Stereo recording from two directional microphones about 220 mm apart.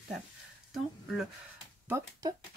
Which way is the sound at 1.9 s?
15° right (ahead or behind).